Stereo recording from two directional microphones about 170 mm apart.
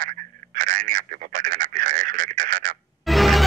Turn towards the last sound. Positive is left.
turn(degrees=0)  # may be behind; listen again after turning